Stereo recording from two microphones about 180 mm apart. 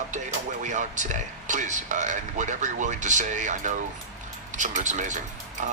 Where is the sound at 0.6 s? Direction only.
40° right (ahead or behind).